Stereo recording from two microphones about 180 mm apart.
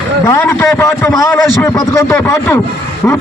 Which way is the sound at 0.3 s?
10° left (ahead or behind).